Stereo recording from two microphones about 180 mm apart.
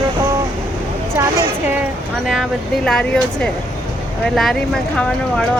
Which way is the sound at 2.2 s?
Centre (ahead or behind).